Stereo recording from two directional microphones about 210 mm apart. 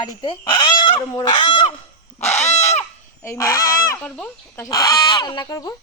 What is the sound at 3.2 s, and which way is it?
Speech, 15° left (ahead or behind).